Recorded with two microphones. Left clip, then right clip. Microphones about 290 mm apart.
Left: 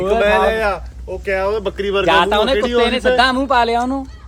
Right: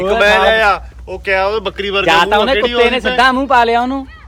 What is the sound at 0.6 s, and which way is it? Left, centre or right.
Speech, centre.